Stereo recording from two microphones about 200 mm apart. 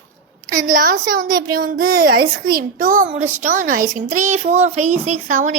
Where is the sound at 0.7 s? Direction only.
45° right (ahead or behind).